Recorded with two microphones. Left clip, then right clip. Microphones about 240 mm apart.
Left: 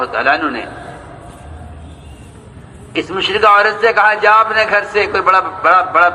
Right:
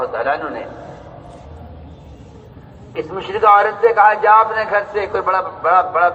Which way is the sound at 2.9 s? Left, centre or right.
Left.